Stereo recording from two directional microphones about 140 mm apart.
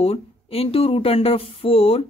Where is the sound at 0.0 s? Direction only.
45° left (ahead or behind).